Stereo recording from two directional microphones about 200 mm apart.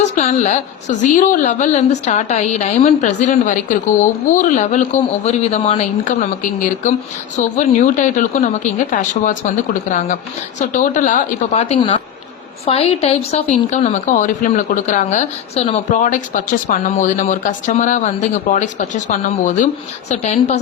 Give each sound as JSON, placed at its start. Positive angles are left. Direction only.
{"t": 0.2, "sound": "a woman's voice", "side_deg": 35}
{"t": 10.6, "sound": "a woman's voice", "side_deg": 40}